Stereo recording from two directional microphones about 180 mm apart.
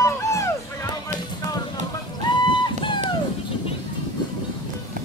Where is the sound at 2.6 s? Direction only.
25° left (ahead or behind).